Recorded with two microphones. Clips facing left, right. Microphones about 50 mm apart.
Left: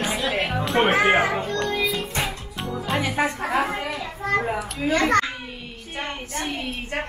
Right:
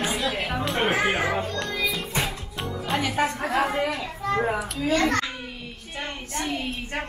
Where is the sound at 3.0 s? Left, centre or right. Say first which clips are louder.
Even; centre.